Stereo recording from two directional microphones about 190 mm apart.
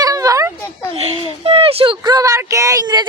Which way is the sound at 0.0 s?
20° right (ahead or behind).